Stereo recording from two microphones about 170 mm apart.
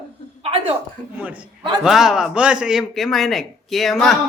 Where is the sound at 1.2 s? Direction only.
10° right (ahead or behind).